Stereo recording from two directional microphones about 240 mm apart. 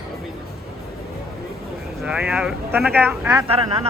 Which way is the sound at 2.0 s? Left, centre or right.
Centre.